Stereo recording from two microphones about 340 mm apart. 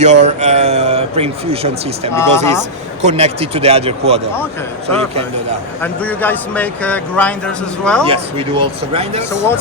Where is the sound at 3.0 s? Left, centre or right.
Centre.